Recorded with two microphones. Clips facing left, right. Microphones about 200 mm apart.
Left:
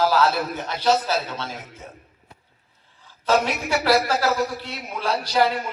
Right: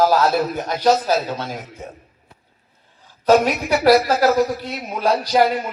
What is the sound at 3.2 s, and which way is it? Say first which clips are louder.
Speech: right 6 dB; 40° right (ahead or behind).